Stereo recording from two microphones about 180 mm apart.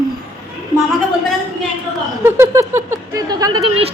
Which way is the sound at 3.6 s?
35° right (ahead or behind).